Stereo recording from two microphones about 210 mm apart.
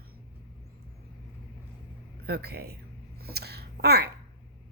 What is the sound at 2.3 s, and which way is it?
Speech, 50° right (ahead or behind).